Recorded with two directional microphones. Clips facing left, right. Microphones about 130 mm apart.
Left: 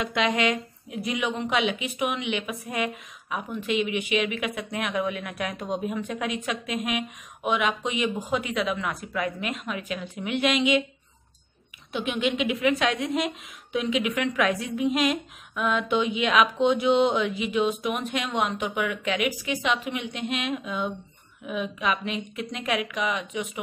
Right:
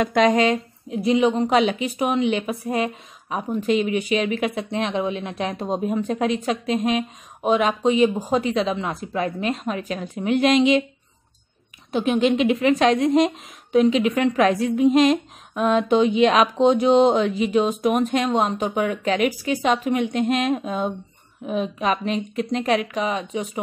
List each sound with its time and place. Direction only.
0.0 s a woman's voice: 45° right (ahead or behind)
11.9 s a woman's voice: 40° right (ahead or behind)